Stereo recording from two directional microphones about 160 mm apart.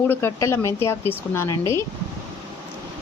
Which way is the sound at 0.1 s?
15° left (ahead or behind).